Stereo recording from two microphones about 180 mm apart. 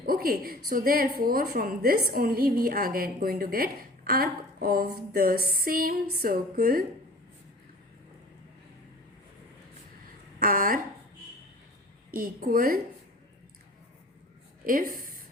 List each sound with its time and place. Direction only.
0.0 s a woman's voice: 55° right (ahead or behind)
10.4 s a woman's voice: 50° right (ahead or behind)
12.1 s a woman's voice: 50° right (ahead or behind)
14.7 s a woman's voice: 50° right (ahead or behind)